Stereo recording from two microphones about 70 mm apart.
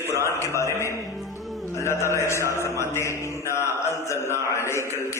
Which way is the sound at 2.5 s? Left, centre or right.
Left.